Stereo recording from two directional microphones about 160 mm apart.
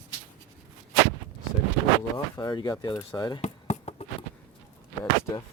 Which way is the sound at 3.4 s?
45° left (ahead or behind).